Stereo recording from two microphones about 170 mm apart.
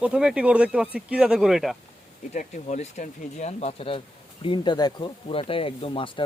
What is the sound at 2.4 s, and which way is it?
Speech, 45° left (ahead or behind).